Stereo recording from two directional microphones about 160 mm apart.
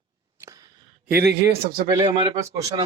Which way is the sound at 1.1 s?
75° right (ahead or behind).